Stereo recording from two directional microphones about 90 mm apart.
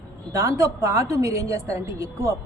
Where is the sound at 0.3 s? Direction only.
35° right (ahead or behind).